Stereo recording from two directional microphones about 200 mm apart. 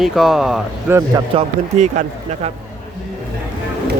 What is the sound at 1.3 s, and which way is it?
Speech, 35° right (ahead or behind).